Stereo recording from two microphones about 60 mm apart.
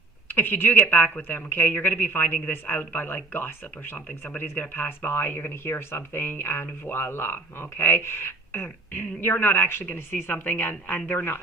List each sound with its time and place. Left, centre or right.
0.3 s speech: left